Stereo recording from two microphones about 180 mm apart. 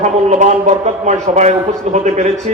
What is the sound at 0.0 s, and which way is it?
A man's voice, 40° right (ahead or behind).